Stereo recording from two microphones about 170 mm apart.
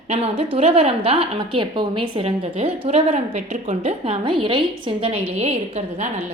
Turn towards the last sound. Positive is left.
turn(degrees=-40)  # may be behind; listen again after turning